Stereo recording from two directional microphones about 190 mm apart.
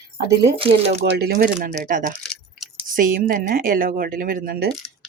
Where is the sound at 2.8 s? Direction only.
45° right (ahead or behind).